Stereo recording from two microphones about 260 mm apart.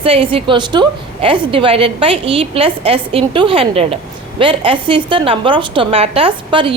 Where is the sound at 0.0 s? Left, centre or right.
Right.